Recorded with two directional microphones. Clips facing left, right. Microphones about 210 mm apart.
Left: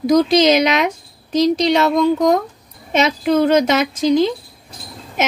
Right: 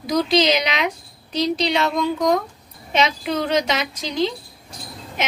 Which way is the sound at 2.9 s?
45° left (ahead or behind).